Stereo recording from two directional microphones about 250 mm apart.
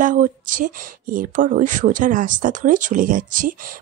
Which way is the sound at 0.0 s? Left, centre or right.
Right.